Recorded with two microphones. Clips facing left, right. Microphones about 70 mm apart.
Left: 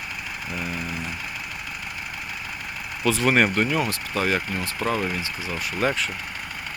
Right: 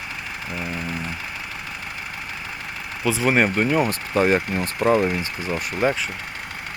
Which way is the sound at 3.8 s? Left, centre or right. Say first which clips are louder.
Right 5 dB; right.